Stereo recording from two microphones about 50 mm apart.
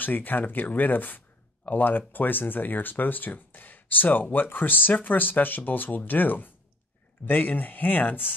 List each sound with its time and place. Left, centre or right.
0.0 s speech: left